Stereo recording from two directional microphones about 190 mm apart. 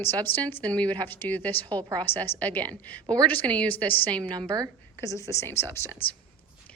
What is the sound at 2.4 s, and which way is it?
A woman's voice, 10° left (ahead or behind).